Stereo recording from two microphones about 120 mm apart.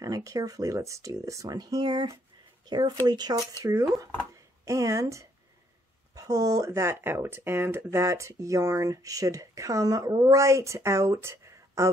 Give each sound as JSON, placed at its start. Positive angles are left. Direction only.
{"t": 0.0, "sound": "speech", "side_deg": -30}
{"t": 3.6, "sound": "speech", "side_deg": -25}